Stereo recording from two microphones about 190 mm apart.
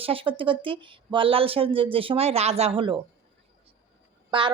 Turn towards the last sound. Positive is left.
turn(degrees=-25)  # may be behind; listen again after turning